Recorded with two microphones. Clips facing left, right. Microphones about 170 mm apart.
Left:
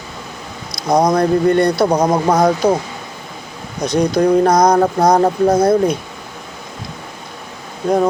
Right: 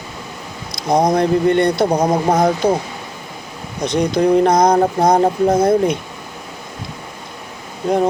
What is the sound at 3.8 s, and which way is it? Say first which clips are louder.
Speech: left 1 dB; 25° right (ahead or behind).